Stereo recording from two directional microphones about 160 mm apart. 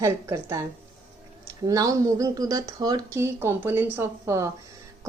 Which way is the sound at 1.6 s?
20° right (ahead or behind).